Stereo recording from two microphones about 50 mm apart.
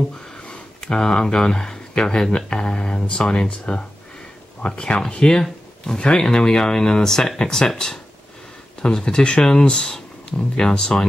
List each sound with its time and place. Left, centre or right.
0.4 s speech: centre